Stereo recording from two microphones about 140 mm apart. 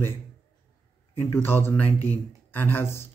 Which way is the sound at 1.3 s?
15° left (ahead or behind).